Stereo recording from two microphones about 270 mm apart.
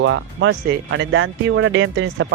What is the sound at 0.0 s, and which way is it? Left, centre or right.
Speech, right.